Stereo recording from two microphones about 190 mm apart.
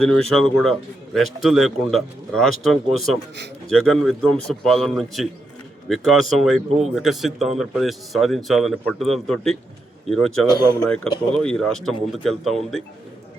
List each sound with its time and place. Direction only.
0.0 s speech: 5° left (ahead or behind)